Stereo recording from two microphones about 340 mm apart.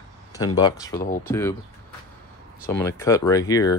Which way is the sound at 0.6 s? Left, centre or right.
Centre.